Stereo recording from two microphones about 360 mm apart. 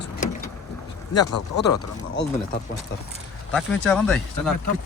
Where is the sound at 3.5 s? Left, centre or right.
Centre.